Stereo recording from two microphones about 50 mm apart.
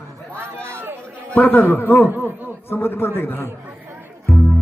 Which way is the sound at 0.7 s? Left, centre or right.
Right.